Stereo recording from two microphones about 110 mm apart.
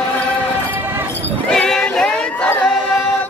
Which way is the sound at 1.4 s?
5° left (ahead or behind).